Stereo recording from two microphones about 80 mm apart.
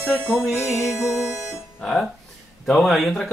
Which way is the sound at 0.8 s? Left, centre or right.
Centre.